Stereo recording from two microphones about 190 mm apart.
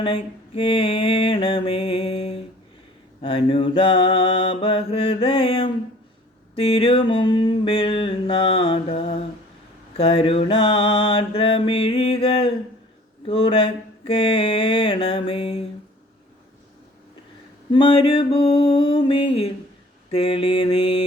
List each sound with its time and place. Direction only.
0.0 s mantra: 25° left (ahead or behind)
17.7 s a sound: 25° left (ahead or behind)
20.1 s mantra: 30° left (ahead or behind)